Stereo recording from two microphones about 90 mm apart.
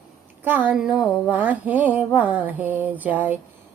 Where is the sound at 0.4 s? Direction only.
20° right (ahead or behind).